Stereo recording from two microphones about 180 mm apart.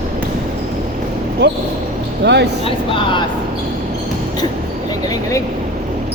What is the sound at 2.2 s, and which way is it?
Speech, 70° right (ahead or behind).